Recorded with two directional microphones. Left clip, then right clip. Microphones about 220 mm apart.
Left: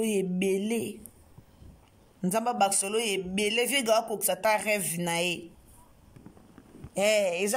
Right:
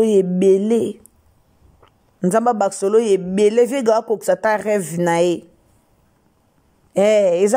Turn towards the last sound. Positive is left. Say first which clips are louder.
# right 12 dB
turn(degrees=-30)  # may be behind; listen again after turning